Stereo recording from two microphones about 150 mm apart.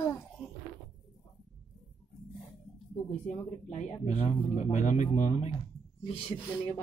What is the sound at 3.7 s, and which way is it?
Speech, 50° left (ahead or behind).